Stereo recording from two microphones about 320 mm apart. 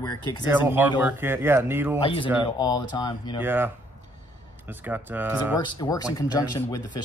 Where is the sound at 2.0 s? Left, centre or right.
Centre.